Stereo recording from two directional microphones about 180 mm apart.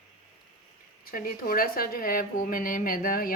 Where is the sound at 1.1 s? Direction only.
50° left (ahead or behind).